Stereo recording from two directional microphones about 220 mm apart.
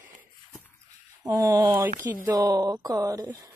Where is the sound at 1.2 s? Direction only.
15° right (ahead or behind).